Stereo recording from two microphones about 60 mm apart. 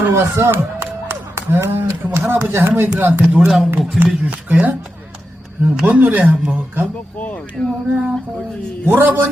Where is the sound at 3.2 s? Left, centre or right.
Centre.